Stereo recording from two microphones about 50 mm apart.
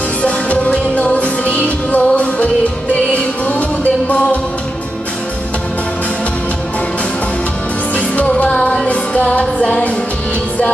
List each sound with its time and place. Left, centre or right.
0.2 s music: left
8.3 s music: left